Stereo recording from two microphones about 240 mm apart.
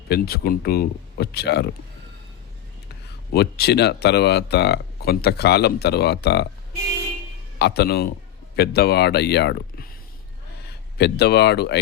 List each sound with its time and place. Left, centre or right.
0.1 s speech: left
3.3 s speech: left
7.6 s speech: left